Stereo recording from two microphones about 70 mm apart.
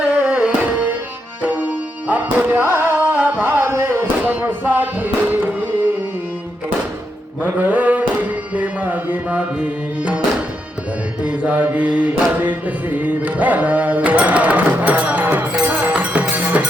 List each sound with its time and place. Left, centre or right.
0.2 s music: centre; by 4.1 s right
4.2 s music: right
7.4 s music: right
11.2 s mantra: centre
12.4 s music: right